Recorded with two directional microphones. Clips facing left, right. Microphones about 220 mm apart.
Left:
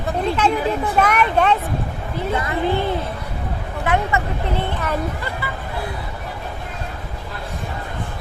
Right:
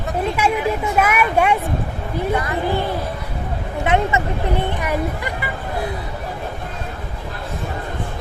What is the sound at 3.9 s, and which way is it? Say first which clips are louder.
Speech: right 2 dB; 15° right (ahead or behind).